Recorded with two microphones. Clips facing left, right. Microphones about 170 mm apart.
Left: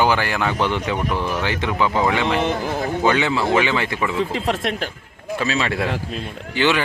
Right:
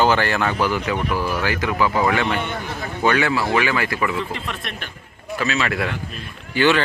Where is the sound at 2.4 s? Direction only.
90° left.